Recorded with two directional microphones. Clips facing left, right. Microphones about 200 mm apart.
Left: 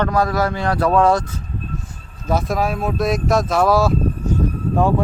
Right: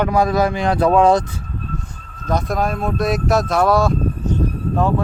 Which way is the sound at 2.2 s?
5° left (ahead or behind).